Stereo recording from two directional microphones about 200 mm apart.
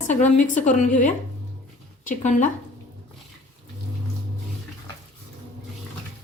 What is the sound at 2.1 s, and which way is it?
Speech, 40° left (ahead or behind).